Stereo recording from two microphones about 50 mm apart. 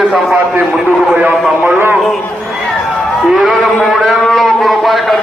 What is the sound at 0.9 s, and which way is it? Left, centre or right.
Speech, right.